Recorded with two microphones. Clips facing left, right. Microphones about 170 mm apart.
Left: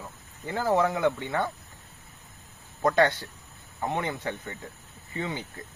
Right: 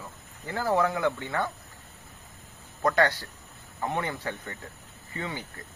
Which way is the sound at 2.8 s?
20° left (ahead or behind).